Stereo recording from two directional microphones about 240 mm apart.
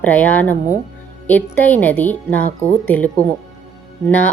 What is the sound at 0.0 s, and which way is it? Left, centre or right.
A woman's voice, centre.